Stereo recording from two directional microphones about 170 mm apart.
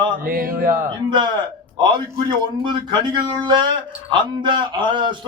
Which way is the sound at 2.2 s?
25° right (ahead or behind).